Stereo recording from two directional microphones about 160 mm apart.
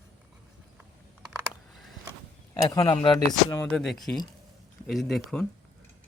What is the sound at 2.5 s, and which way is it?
Speech, 25° left (ahead or behind).